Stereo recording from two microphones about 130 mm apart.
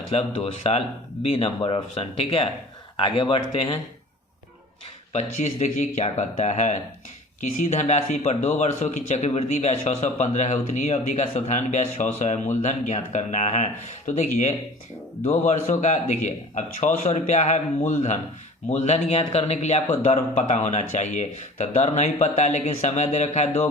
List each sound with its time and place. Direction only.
0.1 s speech: 50° left (ahead or behind)
5.1 s a man's voice: 65° left (ahead or behind)